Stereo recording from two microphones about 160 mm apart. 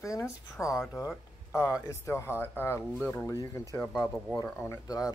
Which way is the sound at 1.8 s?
20° left (ahead or behind).